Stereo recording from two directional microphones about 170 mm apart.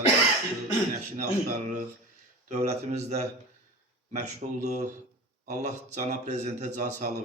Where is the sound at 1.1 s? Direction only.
45° right (ahead or behind).